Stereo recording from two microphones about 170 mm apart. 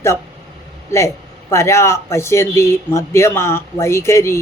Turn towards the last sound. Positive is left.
turn(degrees=15)  # may be behind; listen again after turning